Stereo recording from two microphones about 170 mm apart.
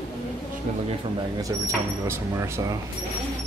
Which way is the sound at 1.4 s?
15° right (ahead or behind).